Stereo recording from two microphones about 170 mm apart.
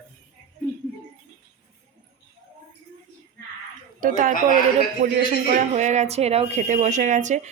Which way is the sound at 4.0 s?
50° right (ahead or behind).